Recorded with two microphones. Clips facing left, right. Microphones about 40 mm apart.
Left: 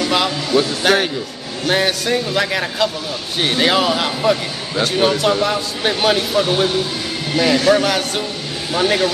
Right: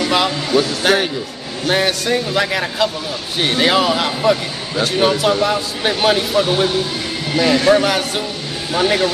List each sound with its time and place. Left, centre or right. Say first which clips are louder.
0.0 s a sound: right 1 dB; centre
0.6 s speech: even; centre
7.5 s a man's voice: right 2 dB; centre